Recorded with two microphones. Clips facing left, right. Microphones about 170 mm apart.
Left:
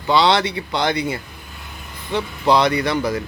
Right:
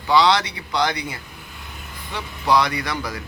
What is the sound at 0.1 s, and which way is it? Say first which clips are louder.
Speech: left 1 dB; 25° left (ahead or behind).